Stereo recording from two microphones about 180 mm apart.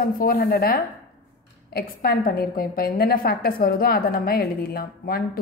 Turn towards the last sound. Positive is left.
turn(degrees=55)  # may be behind; listen again after turning